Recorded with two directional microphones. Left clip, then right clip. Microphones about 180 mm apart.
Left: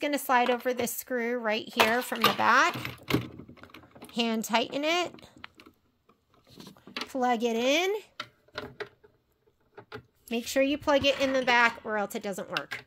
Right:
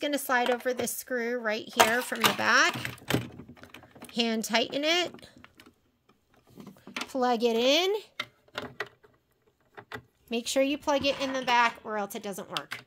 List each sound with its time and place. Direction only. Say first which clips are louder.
0.0 s speech: left 2 dB; 5° left (ahead or behind)
6.8 s speech: right 1 dB; 10° right (ahead or behind)
10.3 s speech: even; centre (ahead or behind)
10.8 s speech: left 3 dB; 15° left (ahead or behind)